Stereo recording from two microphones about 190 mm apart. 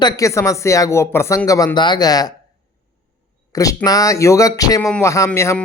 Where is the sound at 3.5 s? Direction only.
20° left (ahead or behind).